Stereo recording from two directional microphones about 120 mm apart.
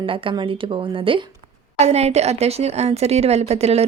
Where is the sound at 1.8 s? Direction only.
60° right (ahead or behind).